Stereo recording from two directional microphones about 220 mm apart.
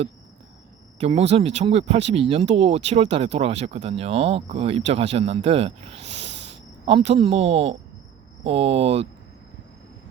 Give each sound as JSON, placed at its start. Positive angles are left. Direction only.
{"t": 0.9, "sound": "speech", "side_deg": -30}